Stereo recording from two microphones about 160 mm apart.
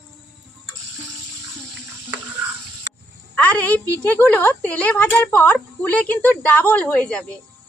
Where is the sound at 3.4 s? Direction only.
10° left (ahead or behind).